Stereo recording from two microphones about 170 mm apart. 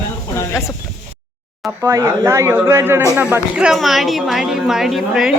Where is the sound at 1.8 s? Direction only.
20° right (ahead or behind).